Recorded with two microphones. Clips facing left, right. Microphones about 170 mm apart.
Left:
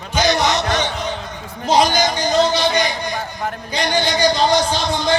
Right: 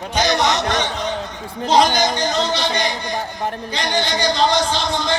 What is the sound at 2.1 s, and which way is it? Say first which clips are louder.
Speech: left 4 dB; 10° left (ahead or behind).